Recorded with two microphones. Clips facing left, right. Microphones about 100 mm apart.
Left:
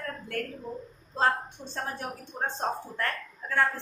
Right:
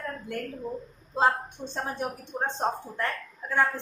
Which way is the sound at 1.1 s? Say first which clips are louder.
Right 2 dB; 15° right (ahead or behind).